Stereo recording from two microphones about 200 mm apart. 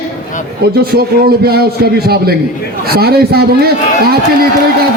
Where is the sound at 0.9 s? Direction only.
50° right (ahead or behind).